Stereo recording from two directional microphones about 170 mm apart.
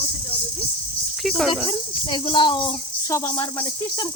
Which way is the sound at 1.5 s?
30° left (ahead or behind).